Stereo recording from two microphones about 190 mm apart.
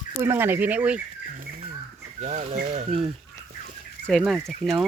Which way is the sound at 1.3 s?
45° right (ahead or behind).